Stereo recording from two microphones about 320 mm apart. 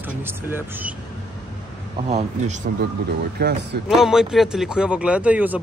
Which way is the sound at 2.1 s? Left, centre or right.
Right.